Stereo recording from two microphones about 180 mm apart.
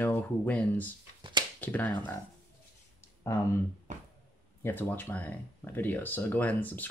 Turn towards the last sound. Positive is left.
turn(degrees=10)  # may be behind; listen again after turning